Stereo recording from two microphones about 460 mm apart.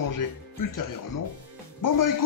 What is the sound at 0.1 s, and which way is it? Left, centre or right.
Speech, left.